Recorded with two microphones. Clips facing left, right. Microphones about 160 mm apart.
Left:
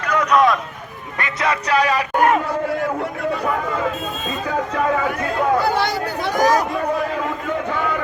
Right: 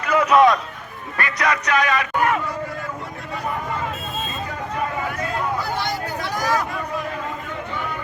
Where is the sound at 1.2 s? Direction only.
25° left (ahead or behind).